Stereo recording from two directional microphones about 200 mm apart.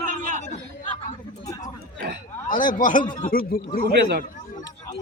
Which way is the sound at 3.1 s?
45° left (ahead or behind).